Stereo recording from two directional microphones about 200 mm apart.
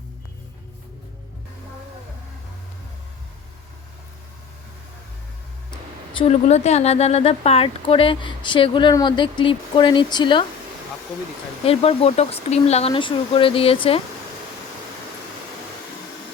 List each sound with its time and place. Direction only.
6.1 s speech: 30° left (ahead or behind)
11.6 s speech: 30° left (ahead or behind)